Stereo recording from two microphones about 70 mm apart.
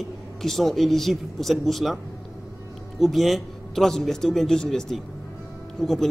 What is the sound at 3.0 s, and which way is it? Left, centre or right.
A man's voice, centre.